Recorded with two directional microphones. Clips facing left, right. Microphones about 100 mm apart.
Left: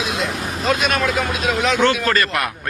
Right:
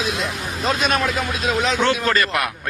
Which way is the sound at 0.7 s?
35° right (ahead or behind).